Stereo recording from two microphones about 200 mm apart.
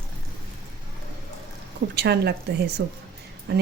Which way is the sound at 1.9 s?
55° right (ahead or behind).